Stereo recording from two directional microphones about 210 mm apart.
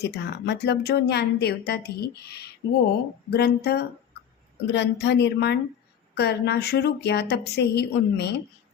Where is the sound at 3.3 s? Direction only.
50° left (ahead or behind).